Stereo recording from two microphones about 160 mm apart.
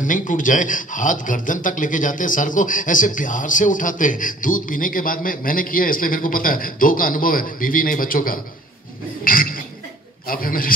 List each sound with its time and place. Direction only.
0.0 s speech: 55° left (ahead or behind)
9.2 s a sound: 60° left (ahead or behind)
10.2 s a man's voice: 65° left (ahead or behind)